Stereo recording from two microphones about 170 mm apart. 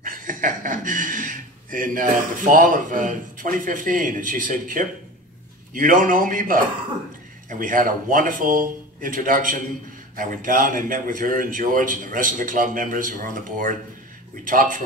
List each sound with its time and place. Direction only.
0.0 s a man's voice: 50° right (ahead or behind)